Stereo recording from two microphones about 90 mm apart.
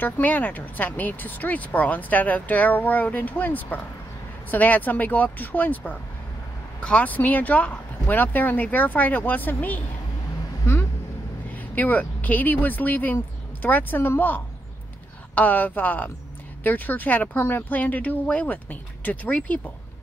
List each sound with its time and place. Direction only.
0.0 s speech: 20° left (ahead or behind)
10.6 s a sound: 30° left (ahead or behind)
11.5 s speech: 20° left (ahead or behind)